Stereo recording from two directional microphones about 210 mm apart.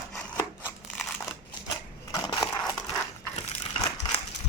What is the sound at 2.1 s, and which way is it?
Crushing, 15° left (ahead or behind).